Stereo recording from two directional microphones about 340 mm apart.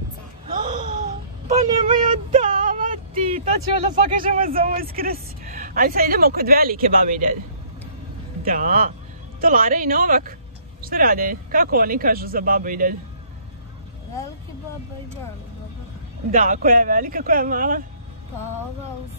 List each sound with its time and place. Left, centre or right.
0.5 s a sound: right
3.9 s speech: right
8.5 s speech: right
16.3 s speech: right